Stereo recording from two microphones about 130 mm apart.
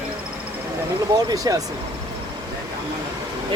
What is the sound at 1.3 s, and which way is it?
Speech, 25° right (ahead or behind).